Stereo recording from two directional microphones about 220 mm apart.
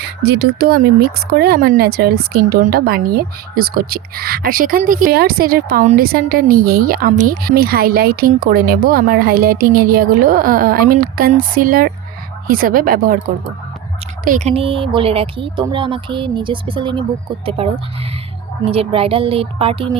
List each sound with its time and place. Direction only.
0.0 s a woman's voice: 50° right (ahead or behind); by 20.0 s 25° right (ahead or behind)